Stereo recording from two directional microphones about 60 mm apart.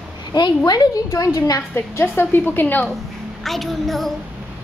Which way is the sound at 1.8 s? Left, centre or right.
Left.